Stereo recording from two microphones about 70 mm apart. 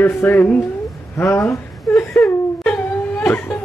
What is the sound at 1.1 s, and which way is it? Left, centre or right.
Speech, left.